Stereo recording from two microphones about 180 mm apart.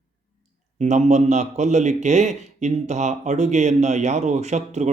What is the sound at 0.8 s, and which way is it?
A man's voice, 40° right (ahead or behind).